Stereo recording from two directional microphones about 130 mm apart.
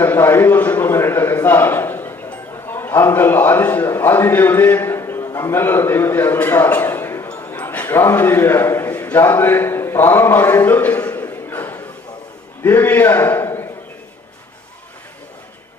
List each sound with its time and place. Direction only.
0.0 s a man's voice: 15° left (ahead or behind)
7.5 s a sound: 10° left (ahead or behind)
12.6 s a man's voice: 15° left (ahead or behind)